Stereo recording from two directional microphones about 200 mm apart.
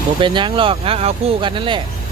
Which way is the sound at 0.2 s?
25° right (ahead or behind).